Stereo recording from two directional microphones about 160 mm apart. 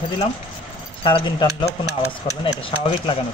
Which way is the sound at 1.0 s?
30° left (ahead or behind).